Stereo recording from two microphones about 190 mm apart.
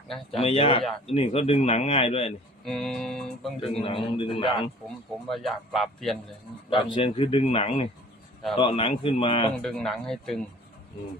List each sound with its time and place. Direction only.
0.3 s a man's voice: 30° left (ahead or behind)
2.6 s speech: centre (ahead or behind)
3.6 s speech: 30° left (ahead or behind)
5.3 s speech: centre (ahead or behind)
6.7 s speech: 25° left (ahead or behind)
9.6 s speech: centre (ahead or behind)